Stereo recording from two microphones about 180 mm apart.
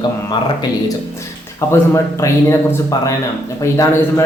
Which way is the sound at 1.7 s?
15° left (ahead or behind).